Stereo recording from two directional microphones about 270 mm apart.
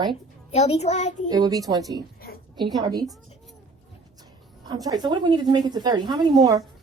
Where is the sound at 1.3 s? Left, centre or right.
Centre.